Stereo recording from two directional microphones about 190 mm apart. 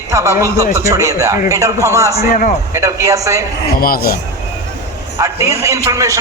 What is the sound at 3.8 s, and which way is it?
Speech, 50° left (ahead or behind).